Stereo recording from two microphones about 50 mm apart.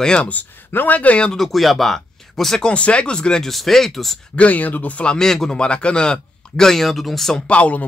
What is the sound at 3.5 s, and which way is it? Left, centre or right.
Speech, centre.